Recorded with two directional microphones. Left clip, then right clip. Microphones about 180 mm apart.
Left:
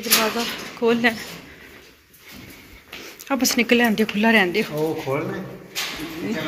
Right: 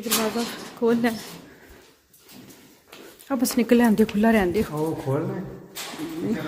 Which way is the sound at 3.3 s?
25° right (ahead or behind).